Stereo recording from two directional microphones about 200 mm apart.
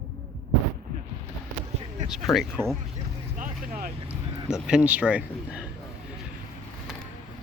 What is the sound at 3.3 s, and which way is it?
Vehicle, 45° right (ahead or behind).